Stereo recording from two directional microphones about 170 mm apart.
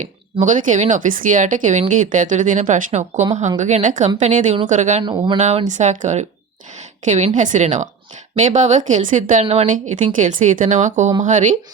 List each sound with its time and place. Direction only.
0.3 s speech: 50° right (ahead or behind)
5.0 s speech: 25° right (ahead or behind)
5.4 s a woman's voice: 45° right (ahead or behind)